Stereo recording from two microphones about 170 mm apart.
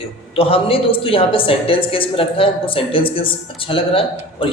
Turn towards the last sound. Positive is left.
turn(degrees=30)  # may be behind; listen again after turning